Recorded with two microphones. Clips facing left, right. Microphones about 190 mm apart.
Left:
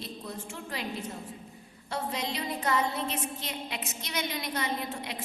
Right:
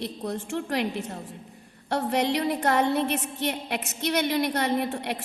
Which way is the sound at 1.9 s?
65° right (ahead or behind).